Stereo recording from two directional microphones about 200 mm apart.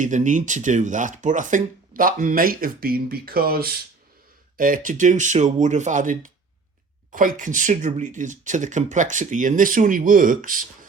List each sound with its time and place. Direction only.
0.0 s speech: 40° right (ahead or behind)